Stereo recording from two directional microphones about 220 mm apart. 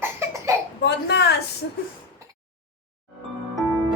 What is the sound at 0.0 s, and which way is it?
Cough, 10° right (ahead or behind).